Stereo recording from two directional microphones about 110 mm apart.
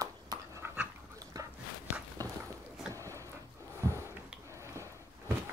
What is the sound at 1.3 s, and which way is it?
Dog, 35° right (ahead or behind).